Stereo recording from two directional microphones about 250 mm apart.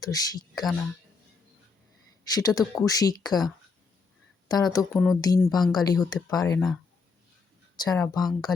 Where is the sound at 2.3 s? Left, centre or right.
Centre.